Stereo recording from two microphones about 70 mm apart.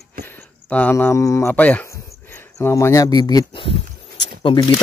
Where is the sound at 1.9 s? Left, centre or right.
Left.